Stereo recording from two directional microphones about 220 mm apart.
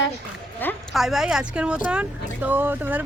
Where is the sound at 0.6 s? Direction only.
5° left (ahead or behind).